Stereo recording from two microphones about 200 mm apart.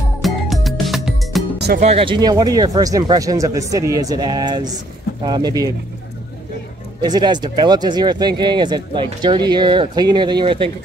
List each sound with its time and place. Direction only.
0.2 s music: centre (ahead or behind)
1.8 s speech: 30° right (ahead or behind)
7.0 s speech: 20° right (ahead or behind)